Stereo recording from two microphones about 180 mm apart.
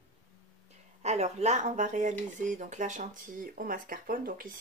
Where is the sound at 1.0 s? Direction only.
35° right (ahead or behind).